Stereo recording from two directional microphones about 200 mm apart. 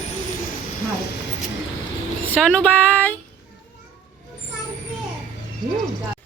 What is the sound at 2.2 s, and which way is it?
Speech, 5° left (ahead or behind).